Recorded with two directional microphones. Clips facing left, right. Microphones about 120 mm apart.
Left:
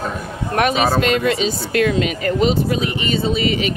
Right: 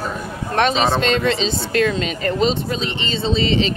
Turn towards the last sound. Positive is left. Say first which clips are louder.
# even
turn(degrees=-30)  # may be behind; listen again after turning